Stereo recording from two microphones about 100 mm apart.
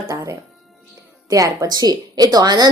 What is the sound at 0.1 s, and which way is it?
Music, 30° right (ahead or behind).